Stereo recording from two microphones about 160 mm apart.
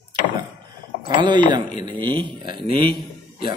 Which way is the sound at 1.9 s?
30° right (ahead or behind).